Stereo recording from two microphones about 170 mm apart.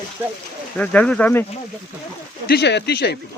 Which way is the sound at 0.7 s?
5° left (ahead or behind).